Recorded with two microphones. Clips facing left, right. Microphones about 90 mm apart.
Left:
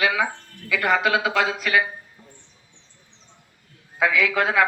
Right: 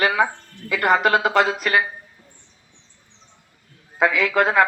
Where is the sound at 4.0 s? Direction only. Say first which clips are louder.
Right 2 dB; 40° right (ahead or behind).